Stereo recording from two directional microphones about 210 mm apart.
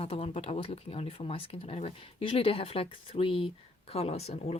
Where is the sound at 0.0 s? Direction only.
25° left (ahead or behind).